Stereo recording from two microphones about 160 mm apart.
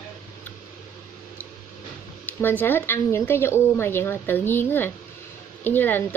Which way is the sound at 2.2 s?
10° left (ahead or behind).